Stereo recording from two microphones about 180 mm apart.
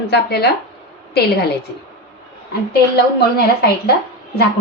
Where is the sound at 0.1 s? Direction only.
65° left (ahead or behind).